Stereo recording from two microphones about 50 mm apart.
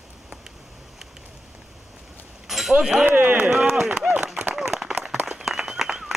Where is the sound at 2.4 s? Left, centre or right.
Centre.